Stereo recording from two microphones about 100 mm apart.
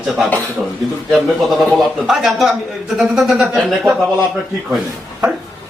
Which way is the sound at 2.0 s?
5° right (ahead or behind).